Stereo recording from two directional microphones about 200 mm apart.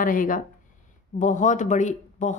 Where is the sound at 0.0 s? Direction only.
40° left (ahead or behind).